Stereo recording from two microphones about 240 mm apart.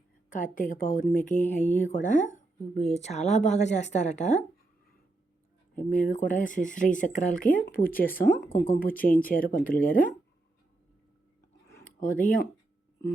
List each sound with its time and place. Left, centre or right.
0.3 s speech: left
5.7 s speech: left
11.9 s speech: left